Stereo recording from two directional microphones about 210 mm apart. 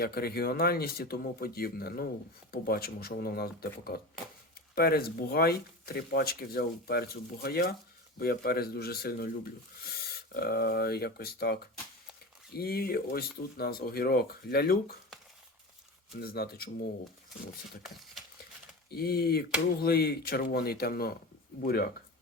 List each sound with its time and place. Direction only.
0.0 s speech: 45° left (ahead or behind)
12.5 s speech: 45° left (ahead or behind)
16.1 s speech: 45° left (ahead or behind)
17.8 s speech: centre (ahead or behind)
18.9 s speech: 50° left (ahead or behind)